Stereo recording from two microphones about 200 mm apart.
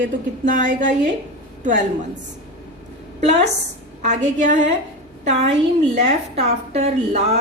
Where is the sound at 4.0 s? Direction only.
35° right (ahead or behind).